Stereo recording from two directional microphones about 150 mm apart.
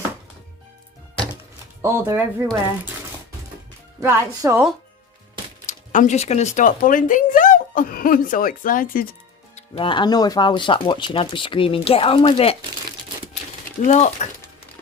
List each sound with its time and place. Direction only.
1.8 s speech: 20° right (ahead or behind)
4.0 s speech: 20° right (ahead or behind)
5.6 s speech: 55° left (ahead or behind); by 9.1 s 70° left (ahead or behind)
9.6 s speech: 35° left (ahead or behind)
13.8 s speech: 45° left (ahead or behind)